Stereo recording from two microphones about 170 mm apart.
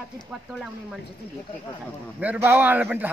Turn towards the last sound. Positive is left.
turn(degrees=-10)  # may be behind; listen again after turning